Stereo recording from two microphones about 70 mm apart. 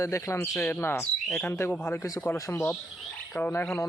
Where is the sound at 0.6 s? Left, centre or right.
Left.